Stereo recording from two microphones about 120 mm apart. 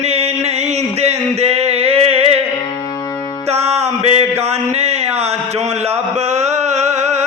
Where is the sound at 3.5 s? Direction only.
60° right (ahead or behind).